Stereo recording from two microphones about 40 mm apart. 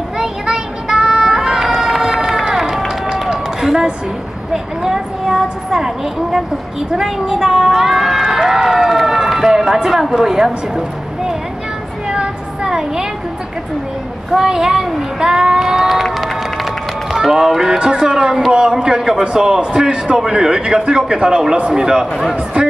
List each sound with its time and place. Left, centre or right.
0.2 s child singing: centre
3.1 s run: centre
4.8 s a sound: centre
7.0 s speech: centre
12.1 s a sound: centre
14.5 s speech: centre
15.1 s a sound: centre
17.1 s a man's voice: centre
22.3 s a man's voice: right